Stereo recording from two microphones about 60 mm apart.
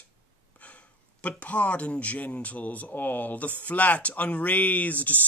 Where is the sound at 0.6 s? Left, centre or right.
Left.